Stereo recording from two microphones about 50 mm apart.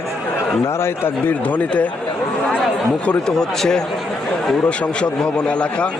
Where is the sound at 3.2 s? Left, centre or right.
Centre.